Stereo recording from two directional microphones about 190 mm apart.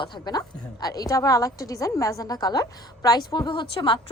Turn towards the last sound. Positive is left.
turn(degrees=25)  # may be behind; listen again after turning